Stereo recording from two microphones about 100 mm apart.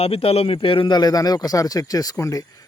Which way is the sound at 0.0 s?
80° left.